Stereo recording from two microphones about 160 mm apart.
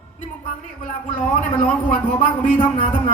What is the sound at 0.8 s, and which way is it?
Speech, 55° left (ahead or behind).